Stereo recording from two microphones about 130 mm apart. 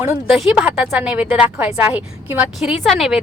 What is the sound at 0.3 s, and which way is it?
A woman's voice, 5° right (ahead or behind).